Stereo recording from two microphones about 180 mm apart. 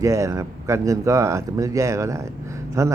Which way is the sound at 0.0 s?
15° right (ahead or behind).